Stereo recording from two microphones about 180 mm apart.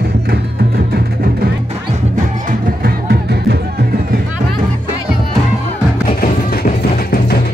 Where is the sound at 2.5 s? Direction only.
55° right (ahead or behind).